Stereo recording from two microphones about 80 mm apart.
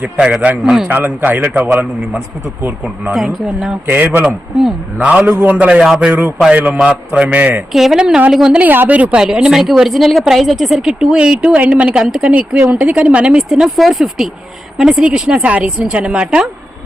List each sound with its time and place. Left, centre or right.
0.6 s a woman's voice: centre
0.9 s a man's voice: right
3.1 s speech: centre
3.8 s a man's voice: right
7.7 s a woman's voice: centre
8.6 s a woman's voice: right
13.5 s a woman's voice: centre